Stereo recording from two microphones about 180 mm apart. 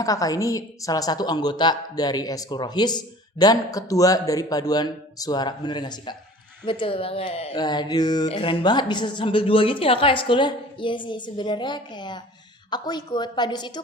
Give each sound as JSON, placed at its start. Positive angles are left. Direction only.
{"t": 0.0, "sound": "a woman's voice", "side_deg": 20}